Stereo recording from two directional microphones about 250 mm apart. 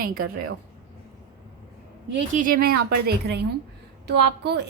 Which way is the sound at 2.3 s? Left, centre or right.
Right.